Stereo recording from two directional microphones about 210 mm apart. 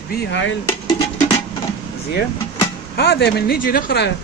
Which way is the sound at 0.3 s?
60° left (ahead or behind).